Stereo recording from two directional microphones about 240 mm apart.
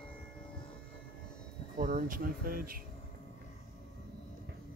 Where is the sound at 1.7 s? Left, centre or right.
Right.